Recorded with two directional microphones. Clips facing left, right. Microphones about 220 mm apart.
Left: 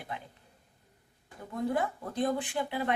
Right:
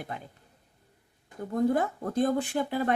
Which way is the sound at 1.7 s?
45° right (ahead or behind).